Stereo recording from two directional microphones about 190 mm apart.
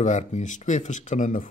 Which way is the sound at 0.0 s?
40° left (ahead or behind).